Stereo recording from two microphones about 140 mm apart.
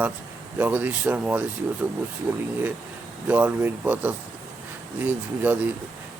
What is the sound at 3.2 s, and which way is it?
Speech, 10° right (ahead or behind).